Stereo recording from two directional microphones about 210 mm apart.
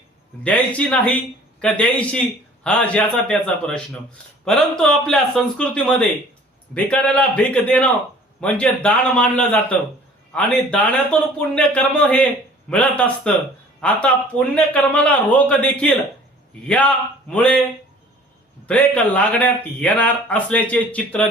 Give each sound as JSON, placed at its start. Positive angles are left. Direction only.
{"t": 0.4, "sound": "a man's voice", "side_deg": 5}
{"t": 18.6, "sound": "a man's voice", "side_deg": 5}